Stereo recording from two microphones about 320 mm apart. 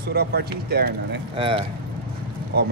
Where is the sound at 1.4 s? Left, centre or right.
Centre.